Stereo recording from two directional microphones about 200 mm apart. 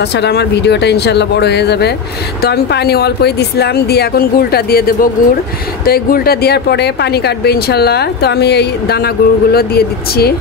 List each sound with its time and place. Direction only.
0.0 s speech: 55° left (ahead or behind)